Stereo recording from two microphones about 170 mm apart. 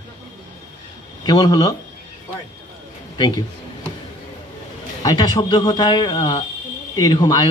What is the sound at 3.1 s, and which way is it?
Speech, 25° left (ahead or behind).